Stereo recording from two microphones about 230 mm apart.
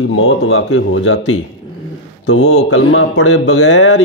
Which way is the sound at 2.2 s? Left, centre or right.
Left.